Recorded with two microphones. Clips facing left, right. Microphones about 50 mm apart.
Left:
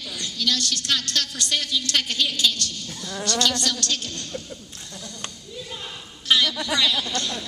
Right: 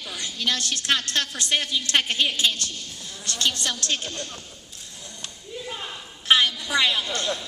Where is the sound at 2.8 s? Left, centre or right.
Left.